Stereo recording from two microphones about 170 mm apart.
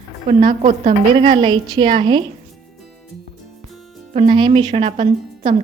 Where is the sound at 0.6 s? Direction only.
45° right (ahead or behind).